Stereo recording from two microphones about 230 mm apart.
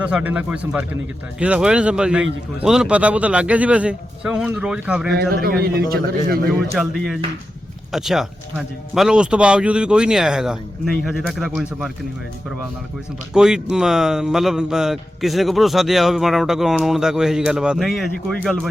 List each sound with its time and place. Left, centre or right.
0.0 s speech: centre
5.1 s a man's voice: right
6.7 s speech: centre
13.3 s speech: centre